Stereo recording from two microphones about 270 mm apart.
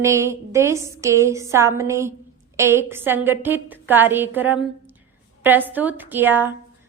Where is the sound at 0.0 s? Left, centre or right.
Centre.